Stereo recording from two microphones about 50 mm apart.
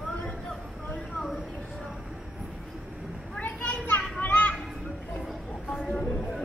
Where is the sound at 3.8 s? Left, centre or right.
Left.